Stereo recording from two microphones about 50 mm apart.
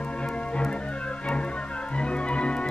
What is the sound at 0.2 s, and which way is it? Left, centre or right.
Music, left.